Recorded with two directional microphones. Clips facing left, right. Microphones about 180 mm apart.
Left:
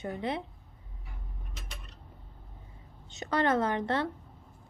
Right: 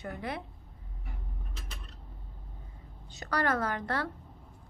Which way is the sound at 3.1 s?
20° left (ahead or behind).